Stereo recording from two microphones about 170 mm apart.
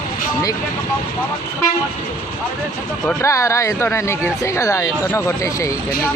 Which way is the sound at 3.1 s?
15° left (ahead or behind).